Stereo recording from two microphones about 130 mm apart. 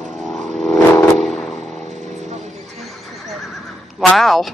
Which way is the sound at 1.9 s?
60° right (ahead or behind).